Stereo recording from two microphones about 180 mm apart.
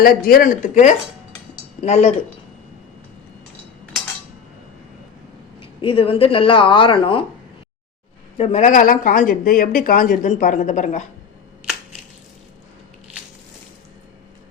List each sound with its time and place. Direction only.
0.0 s speech: 55° left (ahead or behind); by 2.1 s 40° left (ahead or behind)
5.5 s speech: 30° left (ahead or behind)
8.4 s speech: 40° left (ahead or behind)